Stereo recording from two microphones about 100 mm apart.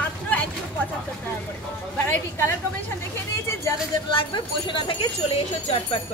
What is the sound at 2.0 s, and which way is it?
Speech, 20° left (ahead or behind).